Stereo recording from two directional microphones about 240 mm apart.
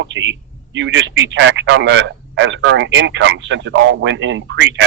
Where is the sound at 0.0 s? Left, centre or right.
Right.